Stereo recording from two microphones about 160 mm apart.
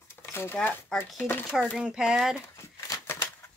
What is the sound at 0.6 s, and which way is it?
Speech, 10° left (ahead or behind).